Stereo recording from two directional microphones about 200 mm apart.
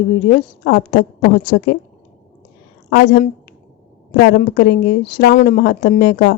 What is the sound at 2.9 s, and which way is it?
Speech, 50° left (ahead or behind).